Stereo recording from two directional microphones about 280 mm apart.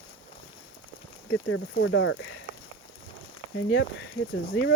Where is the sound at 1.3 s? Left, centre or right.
Left.